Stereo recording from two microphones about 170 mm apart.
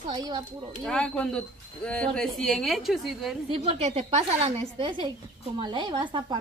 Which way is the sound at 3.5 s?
35° right (ahead or behind).